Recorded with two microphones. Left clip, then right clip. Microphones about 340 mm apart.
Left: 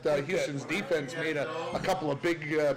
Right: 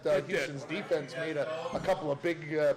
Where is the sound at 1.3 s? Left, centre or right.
Left.